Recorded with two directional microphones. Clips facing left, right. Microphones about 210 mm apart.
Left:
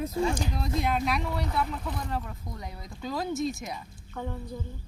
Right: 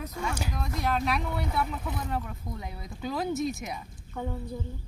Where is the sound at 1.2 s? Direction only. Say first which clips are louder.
Even; centre (ahead or behind).